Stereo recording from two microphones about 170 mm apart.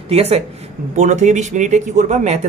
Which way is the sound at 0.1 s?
40° right (ahead or behind).